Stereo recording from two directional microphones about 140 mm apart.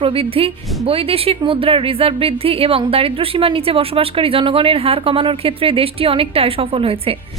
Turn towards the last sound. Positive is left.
turn(degrees=-45)  # may be behind; listen again after turning